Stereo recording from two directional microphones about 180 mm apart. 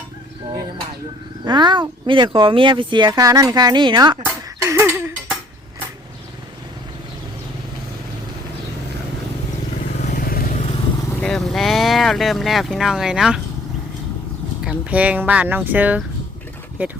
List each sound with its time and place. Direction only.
1.5 s speech: 25° right (ahead or behind)
4.6 s a sound: 15° right (ahead or behind)
10.0 s vehicle: 45° left (ahead or behind)
11.2 s speech: 5° left (ahead or behind)
14.6 s speech: 5° right (ahead or behind)